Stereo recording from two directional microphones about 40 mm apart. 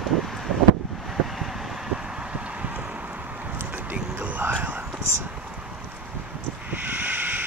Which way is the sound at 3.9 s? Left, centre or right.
Right.